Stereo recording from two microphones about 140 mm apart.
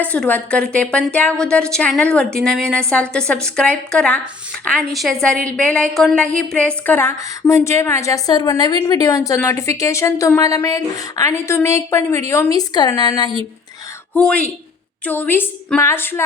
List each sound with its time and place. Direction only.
0.0 s a woman's voice: 10° left (ahead or behind); by 13.3 s 30° left (ahead or behind)
14.1 s a woman's voice: 5° left (ahead or behind)